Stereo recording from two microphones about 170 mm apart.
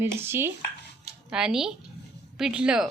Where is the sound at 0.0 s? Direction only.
15° right (ahead or behind).